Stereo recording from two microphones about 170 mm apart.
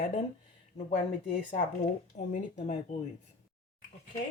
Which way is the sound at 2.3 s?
45° left (ahead or behind).